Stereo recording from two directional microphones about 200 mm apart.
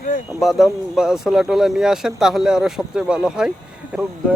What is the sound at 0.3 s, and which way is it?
Speech, centre (ahead or behind).